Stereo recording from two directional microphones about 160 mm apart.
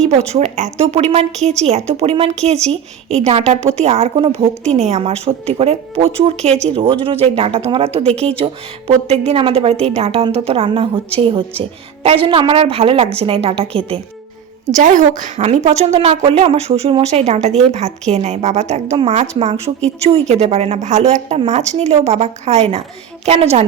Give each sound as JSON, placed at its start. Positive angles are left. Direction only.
{"t": 0.0, "sound": "a woman's voice", "side_deg": -40}
{"t": 14.7, "sound": "a woman's voice", "side_deg": -50}